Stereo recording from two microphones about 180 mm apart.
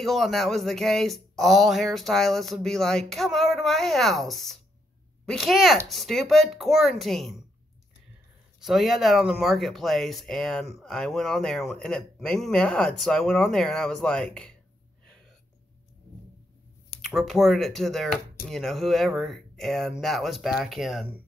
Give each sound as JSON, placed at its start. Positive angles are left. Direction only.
{"t": 0.0, "sound": "speech", "side_deg": 0}
{"t": 8.5, "sound": "speech", "side_deg": 0}
{"t": 17.0, "sound": "speech", "side_deg": 0}